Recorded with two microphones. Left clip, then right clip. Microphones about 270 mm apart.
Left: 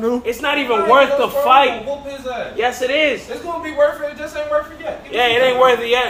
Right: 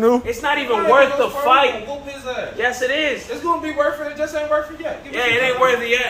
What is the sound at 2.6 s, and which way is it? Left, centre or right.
Speech, left.